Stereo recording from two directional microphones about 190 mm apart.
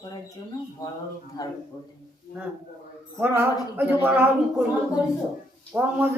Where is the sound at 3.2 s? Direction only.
10° right (ahead or behind).